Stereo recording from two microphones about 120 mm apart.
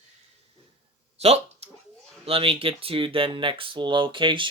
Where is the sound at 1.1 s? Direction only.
60° right (ahead or behind).